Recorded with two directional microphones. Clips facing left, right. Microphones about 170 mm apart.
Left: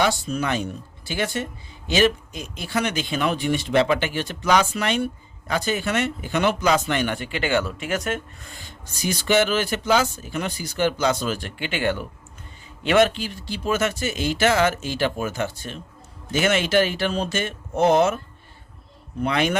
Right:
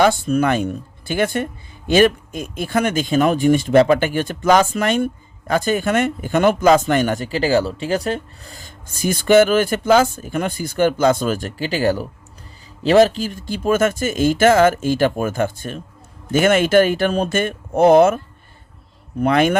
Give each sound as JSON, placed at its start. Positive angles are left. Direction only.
{"t": 0.0, "sound": "speech", "side_deg": -55}
{"t": 19.2, "sound": "speech", "side_deg": -50}